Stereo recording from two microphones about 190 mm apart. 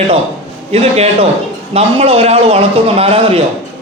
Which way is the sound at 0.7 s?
35° right (ahead or behind).